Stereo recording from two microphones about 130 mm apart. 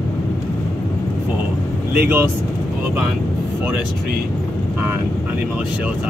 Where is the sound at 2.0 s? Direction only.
15° right (ahead or behind).